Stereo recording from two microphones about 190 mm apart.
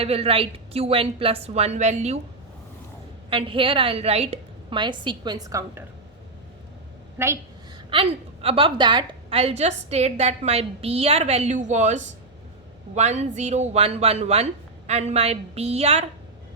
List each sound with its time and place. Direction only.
0.0 s a woman's voice: 30° right (ahead or behind)
3.2 s a woman's voice: 30° right (ahead or behind)
7.2 s a woman's voice: 15° right (ahead or behind)
7.9 s a woman's voice: 30° right (ahead or behind)